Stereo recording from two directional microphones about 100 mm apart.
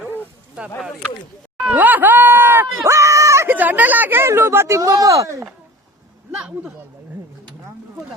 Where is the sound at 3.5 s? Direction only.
15° right (ahead or behind).